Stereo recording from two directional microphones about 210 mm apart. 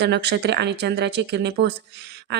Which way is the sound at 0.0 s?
55° right (ahead or behind).